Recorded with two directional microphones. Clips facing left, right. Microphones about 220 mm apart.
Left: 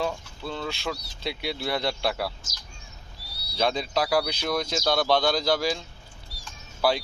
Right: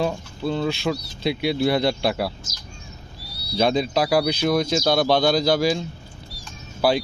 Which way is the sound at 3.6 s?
15° right (ahead or behind).